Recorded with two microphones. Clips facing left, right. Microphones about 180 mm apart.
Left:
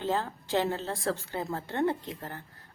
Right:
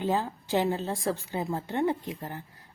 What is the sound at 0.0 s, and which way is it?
A woman's voice, 15° right (ahead or behind).